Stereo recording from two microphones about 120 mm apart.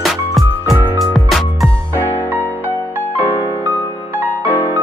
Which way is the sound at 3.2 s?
15° right (ahead or behind).